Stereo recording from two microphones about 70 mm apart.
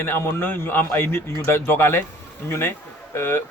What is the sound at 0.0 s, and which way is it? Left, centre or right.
A man's voice, left.